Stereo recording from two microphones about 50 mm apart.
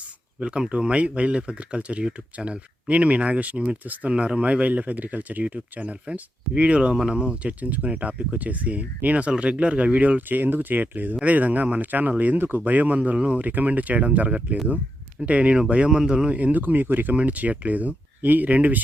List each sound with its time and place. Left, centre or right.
0.3 s speech: right
13.4 s speech: right